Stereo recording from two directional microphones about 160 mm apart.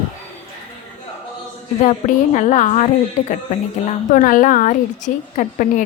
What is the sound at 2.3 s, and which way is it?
Speech, 50° left (ahead or behind).